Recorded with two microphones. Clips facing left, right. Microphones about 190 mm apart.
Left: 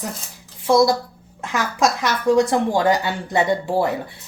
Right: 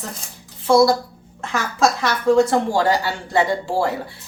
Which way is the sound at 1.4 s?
15° left (ahead or behind).